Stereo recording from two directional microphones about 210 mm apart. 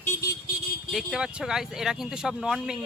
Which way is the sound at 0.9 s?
Centre (ahead or behind).